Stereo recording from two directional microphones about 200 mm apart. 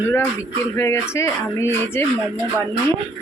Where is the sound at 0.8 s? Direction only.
15° left (ahead or behind).